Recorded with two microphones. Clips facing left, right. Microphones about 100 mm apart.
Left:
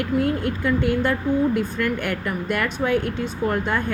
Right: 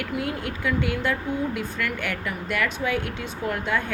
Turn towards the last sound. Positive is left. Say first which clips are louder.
# left 3 dB
turn(degrees=45)  # may be behind; listen again after turning